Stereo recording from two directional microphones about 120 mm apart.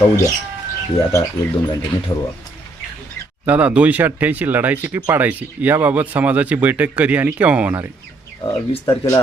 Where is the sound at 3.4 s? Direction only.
10° right (ahead or behind).